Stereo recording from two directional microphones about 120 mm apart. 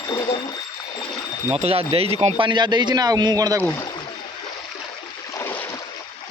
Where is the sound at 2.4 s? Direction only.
40° right (ahead or behind).